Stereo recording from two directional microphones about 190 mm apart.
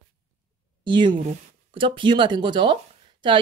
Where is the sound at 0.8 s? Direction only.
25° right (ahead or behind).